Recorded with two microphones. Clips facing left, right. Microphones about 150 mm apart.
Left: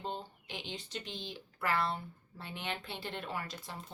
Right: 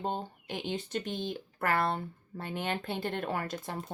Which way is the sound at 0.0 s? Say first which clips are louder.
Right 6 dB; 50° right (ahead or behind).